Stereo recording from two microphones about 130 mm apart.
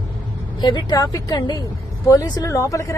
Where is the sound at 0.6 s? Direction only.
35° left (ahead or behind).